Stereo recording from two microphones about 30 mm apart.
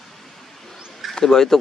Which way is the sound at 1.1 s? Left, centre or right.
Centre.